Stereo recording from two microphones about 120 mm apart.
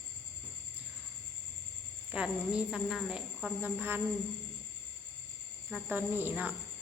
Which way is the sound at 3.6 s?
15° right (ahead or behind).